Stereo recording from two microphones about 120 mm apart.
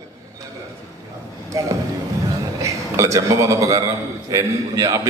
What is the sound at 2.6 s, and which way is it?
A man's voice, 25° right (ahead or behind).